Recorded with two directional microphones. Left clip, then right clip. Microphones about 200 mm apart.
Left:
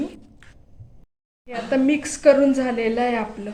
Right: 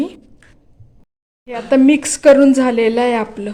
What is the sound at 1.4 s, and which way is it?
A woman's voice, 50° right (ahead or behind).